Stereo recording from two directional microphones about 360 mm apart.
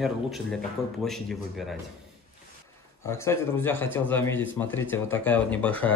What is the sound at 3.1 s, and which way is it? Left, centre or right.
Speech, centre.